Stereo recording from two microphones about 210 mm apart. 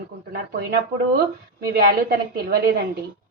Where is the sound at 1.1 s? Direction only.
45° right (ahead or behind).